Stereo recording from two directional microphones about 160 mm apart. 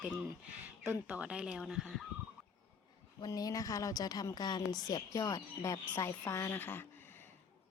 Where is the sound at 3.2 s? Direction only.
20° left (ahead or behind).